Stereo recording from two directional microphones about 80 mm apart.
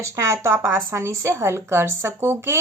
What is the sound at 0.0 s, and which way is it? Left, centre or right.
Speech, right.